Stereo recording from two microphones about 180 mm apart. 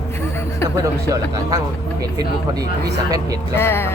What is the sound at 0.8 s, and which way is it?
Speech, 20° right (ahead or behind).